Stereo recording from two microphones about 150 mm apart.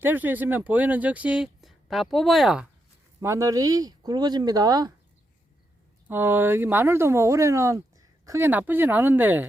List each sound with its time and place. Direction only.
0.0 s speech: 10° right (ahead or behind)
3.2 s speech: 20° right (ahead or behind)
6.1 s speech: 15° right (ahead or behind)